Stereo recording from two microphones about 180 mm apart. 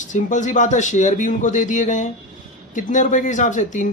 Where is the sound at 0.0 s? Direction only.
45° left (ahead or behind).